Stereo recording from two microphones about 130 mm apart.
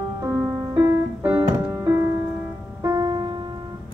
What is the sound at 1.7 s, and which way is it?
Music, 25° right (ahead or behind).